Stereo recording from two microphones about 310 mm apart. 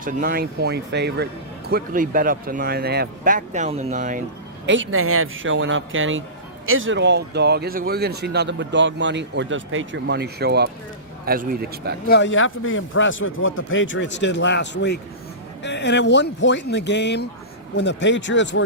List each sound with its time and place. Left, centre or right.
0.0 s speech: right
4.6 s speech: right
12.0 s a man's voice: left